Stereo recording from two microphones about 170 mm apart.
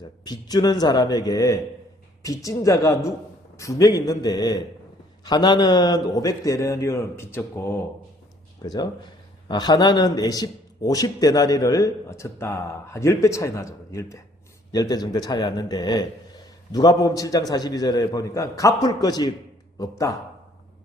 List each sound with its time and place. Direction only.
0.3 s a man's voice: 25° left (ahead or behind)